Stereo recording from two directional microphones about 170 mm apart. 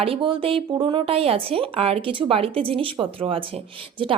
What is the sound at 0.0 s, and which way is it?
A woman's voice, 30° right (ahead or behind).